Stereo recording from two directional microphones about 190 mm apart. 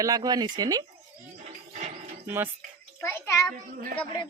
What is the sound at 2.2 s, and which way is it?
Speech, 10° right (ahead or behind).